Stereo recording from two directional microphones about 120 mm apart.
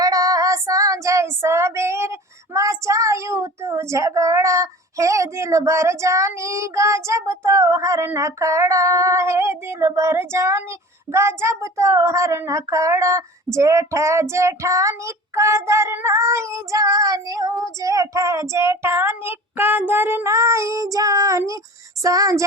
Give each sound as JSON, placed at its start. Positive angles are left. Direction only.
{"t": 0.0, "sound": "child singing", "side_deg": -30}